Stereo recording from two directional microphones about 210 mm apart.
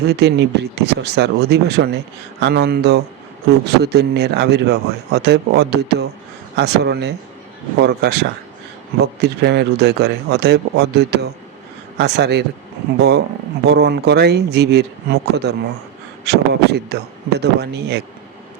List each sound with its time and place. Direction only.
0.0 s speech: 50° right (ahead or behind)